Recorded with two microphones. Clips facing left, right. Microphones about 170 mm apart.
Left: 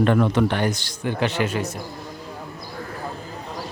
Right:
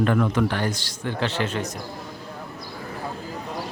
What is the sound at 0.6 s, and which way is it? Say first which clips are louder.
A man's voice: left 3 dB; 20° left (ahead or behind).